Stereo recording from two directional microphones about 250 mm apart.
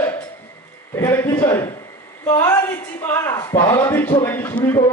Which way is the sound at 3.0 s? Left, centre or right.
Centre.